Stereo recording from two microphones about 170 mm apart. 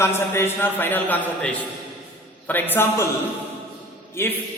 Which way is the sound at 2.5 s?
10° left (ahead or behind).